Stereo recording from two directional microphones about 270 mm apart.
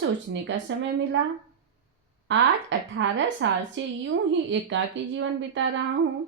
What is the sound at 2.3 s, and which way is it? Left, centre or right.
A woman's voice, right.